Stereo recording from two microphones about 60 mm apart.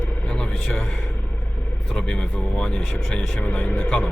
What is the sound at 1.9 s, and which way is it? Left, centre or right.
Speech, centre.